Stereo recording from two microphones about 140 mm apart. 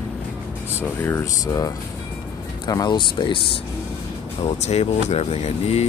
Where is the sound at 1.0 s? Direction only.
20° left (ahead or behind).